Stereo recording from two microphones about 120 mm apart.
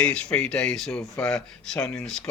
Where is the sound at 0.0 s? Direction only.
10° left (ahead or behind).